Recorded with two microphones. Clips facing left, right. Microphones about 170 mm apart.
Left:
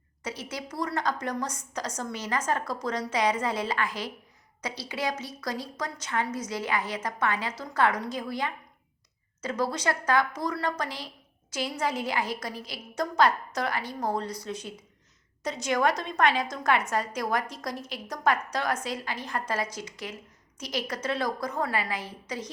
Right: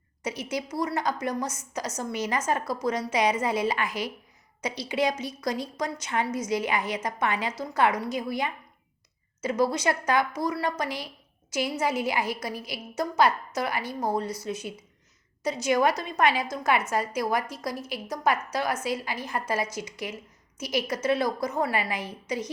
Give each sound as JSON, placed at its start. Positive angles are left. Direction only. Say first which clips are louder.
{"t": 0.2, "sound": "a woman's voice", "louder": "right 5 dB", "side_deg": -10}